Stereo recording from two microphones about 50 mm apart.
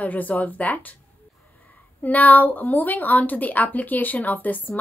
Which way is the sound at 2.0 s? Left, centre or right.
Left.